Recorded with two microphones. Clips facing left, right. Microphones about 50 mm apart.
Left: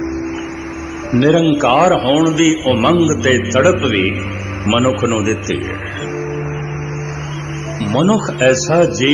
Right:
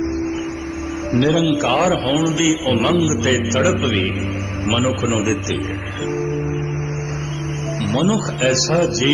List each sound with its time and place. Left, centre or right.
1.1 s a man's voice: left
4.0 s a man's voice: left
7.8 s a man's voice: left